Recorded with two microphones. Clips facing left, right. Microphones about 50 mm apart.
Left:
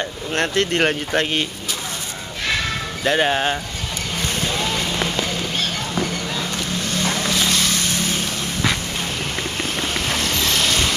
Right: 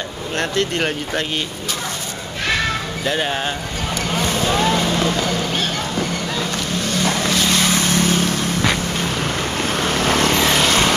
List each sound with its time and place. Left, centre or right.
0.4 s speech: left
3.1 s speech: left
4.2 s vehicle: right
7.0 s vehicle: centre
7.2 s boat: centre
9.8 s vehicle: right